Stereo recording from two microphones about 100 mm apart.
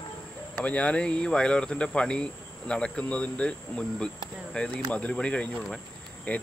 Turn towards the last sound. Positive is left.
turn(degrees=15)  # may be behind; listen again after turning